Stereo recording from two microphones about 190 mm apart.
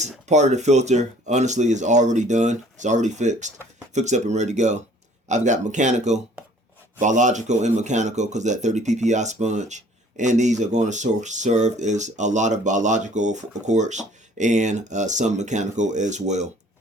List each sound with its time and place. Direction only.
0.0 s speech: 35° right (ahead or behind)